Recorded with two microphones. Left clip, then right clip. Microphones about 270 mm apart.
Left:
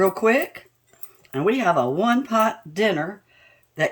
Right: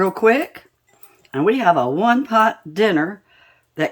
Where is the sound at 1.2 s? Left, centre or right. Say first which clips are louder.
Right 5 dB; centre.